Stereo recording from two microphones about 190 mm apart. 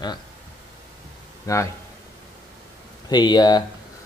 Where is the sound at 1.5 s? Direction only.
15° left (ahead or behind).